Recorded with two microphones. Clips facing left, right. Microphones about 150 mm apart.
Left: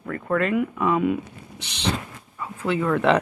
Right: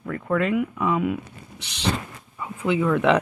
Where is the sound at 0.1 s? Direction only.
10° right (ahead or behind).